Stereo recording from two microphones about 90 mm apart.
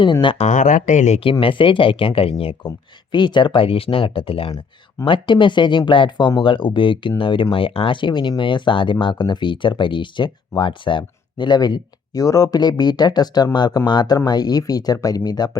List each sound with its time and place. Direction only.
0.0 s speech: 65° left (ahead or behind)
1.2 s speech: 75° left (ahead or behind)
2.6 s speech: 55° left (ahead or behind); by 4.5 s 90° left
5.0 s speech: 65° left (ahead or behind)
7.5 s speech: 85° left; by 15.5 s 45° left (ahead or behind)